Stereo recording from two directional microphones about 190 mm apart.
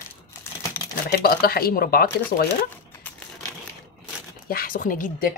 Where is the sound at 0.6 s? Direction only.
15° left (ahead or behind).